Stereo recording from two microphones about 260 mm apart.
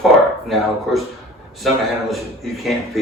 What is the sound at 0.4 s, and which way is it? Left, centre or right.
A man's voice, centre.